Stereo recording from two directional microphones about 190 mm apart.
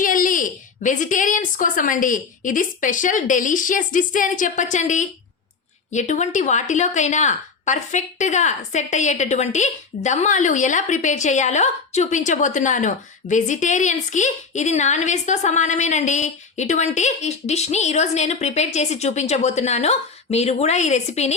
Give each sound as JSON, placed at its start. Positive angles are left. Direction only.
{"t": 0.0, "sound": "a woman's voice", "side_deg": 45}